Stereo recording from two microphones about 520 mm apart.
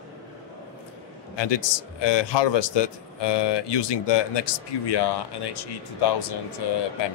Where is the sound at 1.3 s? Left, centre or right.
Left.